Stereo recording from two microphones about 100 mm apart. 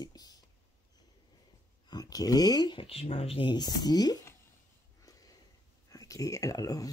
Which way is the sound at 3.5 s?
45° left (ahead or behind).